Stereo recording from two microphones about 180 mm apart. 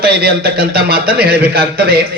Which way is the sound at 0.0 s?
60° right (ahead or behind).